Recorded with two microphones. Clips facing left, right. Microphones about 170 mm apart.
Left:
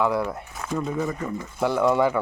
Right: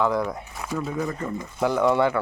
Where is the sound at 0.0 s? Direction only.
5° left (ahead or behind).